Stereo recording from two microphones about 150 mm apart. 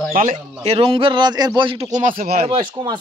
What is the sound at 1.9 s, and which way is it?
Speech, 65° right (ahead or behind).